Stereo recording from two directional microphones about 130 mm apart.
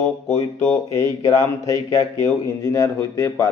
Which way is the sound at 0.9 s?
25° left (ahead or behind).